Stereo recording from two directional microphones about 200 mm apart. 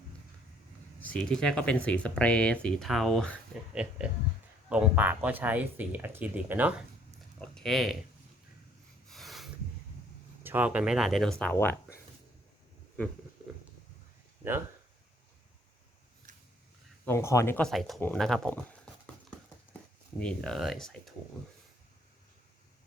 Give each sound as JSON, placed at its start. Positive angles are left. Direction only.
{"t": 1.0, "sound": "speech", "side_deg": 5}
{"t": 9.0, "sound": "a sound", "side_deg": 0}
{"t": 10.4, "sound": "speech", "side_deg": -10}
{"t": 16.3, "sound": "a sound", "side_deg": -40}
{"t": 17.1, "sound": "speech", "side_deg": 15}
{"t": 20.1, "sound": "speech", "side_deg": 5}